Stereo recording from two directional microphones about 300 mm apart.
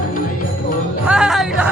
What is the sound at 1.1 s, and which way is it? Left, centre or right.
Music, centre.